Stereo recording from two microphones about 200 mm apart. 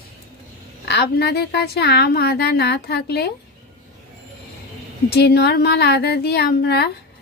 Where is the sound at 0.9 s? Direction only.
55° left (ahead or behind).